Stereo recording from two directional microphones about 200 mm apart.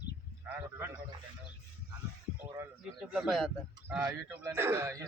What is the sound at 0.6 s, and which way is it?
Speech, 20° right (ahead or behind).